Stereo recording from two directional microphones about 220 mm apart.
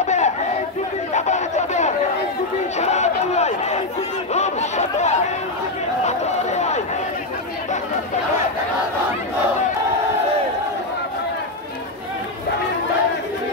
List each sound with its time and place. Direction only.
0.0 s crowd: 30° left (ahead or behind)
1.1 s chatter: 30° left (ahead or behind)
6.0 s a sound: 30° left (ahead or behind)